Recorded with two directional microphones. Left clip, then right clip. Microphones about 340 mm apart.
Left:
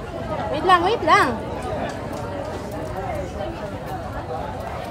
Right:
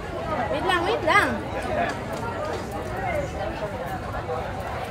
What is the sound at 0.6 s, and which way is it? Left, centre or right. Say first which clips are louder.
Speech: left 8 dB; left.